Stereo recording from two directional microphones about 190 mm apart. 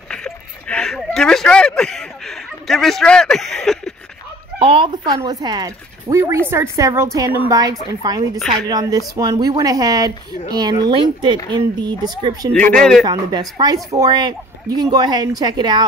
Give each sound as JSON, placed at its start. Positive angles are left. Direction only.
{"t": 0.1, "sound": "speech", "side_deg": 5}
{"t": 4.6, "sound": "a woman's voice", "side_deg": -30}
{"t": 12.5, "sound": "a man's voice", "side_deg": 5}
{"t": 13.0, "sound": "speech", "side_deg": -20}